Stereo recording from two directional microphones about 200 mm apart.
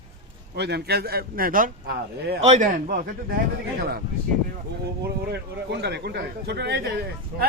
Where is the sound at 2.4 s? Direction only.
35° right (ahead or behind).